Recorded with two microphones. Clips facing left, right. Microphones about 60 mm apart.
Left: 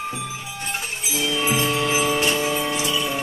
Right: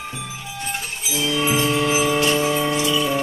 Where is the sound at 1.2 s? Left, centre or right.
Centre.